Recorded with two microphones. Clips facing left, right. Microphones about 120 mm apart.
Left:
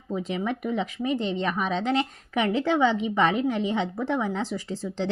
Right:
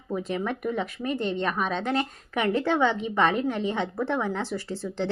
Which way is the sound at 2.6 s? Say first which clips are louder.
Left 1 dB; 10° left (ahead or behind).